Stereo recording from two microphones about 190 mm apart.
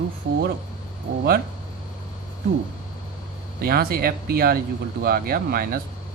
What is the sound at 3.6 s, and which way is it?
Speech, 55° right (ahead or behind).